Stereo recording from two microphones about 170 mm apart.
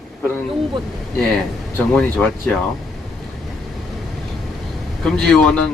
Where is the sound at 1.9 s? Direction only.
10° left (ahead or behind).